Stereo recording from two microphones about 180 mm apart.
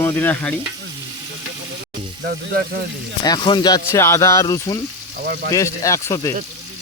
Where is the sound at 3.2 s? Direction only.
25° left (ahead or behind).